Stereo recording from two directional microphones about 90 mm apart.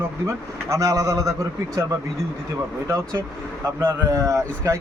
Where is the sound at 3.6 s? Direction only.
35° right (ahead or behind).